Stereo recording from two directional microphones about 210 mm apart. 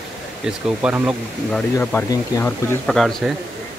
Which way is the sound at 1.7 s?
10° left (ahead or behind).